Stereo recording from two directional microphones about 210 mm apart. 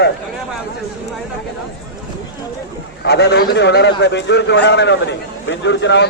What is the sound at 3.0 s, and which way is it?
A man's voice, 55° left (ahead or behind).